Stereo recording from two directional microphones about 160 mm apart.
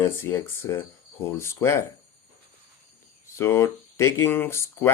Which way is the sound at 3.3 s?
15° left (ahead or behind).